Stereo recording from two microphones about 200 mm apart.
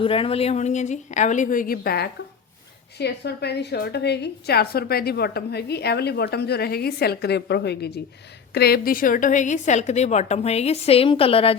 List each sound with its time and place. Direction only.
0.0 s a woman's voice: 25° left (ahead or behind)